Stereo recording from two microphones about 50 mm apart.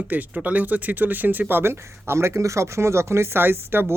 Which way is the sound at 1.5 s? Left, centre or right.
Right.